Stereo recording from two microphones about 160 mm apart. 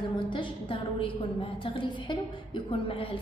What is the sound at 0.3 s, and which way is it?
A woman's voice, 30° left (ahead or behind).